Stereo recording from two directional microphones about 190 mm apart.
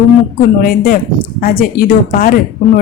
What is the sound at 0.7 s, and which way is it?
A woman's voice, 50° left (ahead or behind).